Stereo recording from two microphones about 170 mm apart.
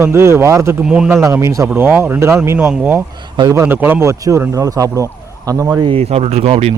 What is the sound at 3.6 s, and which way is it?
Speech, 10° right (ahead or behind).